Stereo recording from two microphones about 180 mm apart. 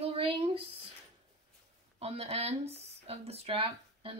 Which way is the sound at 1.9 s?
35° right (ahead or behind).